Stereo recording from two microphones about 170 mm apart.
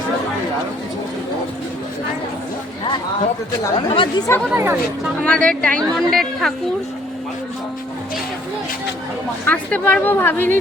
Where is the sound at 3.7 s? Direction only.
30° left (ahead or behind).